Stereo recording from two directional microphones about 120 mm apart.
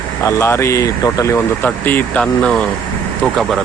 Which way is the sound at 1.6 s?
15° left (ahead or behind).